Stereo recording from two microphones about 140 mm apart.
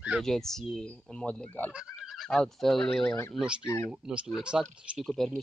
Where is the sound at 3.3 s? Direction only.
5° right (ahead or behind).